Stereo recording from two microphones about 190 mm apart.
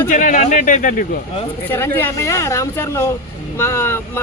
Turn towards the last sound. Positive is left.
turn(degrees=10)  # may be behind; listen again after turning